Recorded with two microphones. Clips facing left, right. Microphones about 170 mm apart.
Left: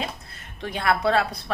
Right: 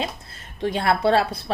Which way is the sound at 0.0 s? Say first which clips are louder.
Right 3 dB; 30° right (ahead or behind).